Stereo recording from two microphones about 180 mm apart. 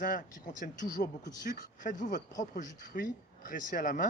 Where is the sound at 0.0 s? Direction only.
45° left (ahead or behind).